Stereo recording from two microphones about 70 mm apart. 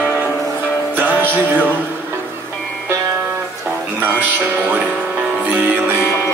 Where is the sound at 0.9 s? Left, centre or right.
Right.